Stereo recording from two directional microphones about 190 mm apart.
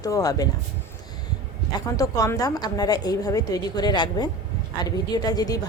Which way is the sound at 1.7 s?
20° left (ahead or behind).